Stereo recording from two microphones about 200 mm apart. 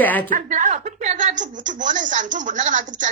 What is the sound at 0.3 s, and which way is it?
A woman's voice, 40° right (ahead or behind).